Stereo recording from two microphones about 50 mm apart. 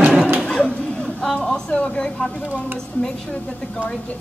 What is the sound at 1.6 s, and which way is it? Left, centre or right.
Speech, left.